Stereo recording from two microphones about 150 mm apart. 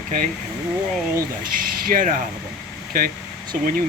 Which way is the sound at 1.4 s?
70° right (ahead or behind).